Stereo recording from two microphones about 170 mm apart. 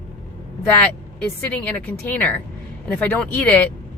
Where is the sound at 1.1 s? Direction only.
10° left (ahead or behind).